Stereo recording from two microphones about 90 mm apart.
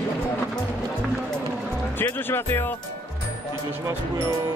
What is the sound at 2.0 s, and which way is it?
Speech, 25° left (ahead or behind).